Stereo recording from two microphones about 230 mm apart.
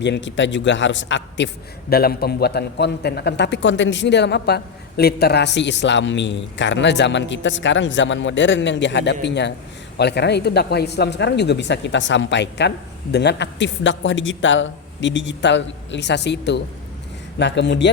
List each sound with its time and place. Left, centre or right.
0.0 s a man's voice: left